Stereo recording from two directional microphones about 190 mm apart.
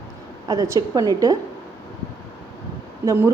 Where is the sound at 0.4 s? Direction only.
20° right (ahead or behind).